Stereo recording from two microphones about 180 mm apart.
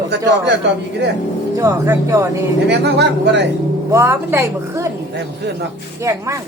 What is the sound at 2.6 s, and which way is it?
Speech, 70° right (ahead or behind).